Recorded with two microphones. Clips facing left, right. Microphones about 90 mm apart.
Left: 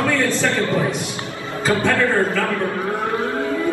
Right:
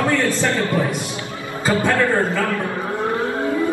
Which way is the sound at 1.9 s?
20° right (ahead or behind).